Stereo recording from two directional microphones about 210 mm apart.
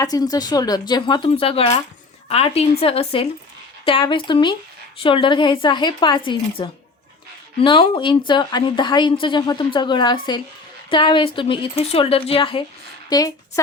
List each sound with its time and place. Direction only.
0.0 s a woman's voice: 15° left (ahead or behind)